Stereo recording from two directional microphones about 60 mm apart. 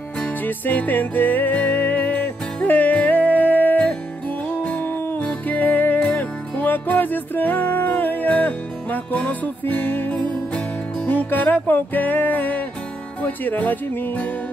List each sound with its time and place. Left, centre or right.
0.5 s music: left